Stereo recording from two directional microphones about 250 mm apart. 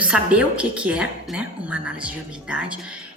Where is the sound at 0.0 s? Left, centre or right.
Centre.